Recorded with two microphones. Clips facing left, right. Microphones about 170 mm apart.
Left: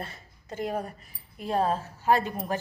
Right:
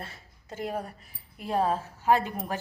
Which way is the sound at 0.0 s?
Centre (ahead or behind).